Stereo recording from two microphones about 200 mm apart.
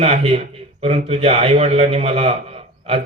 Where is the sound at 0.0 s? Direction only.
30° right (ahead or behind).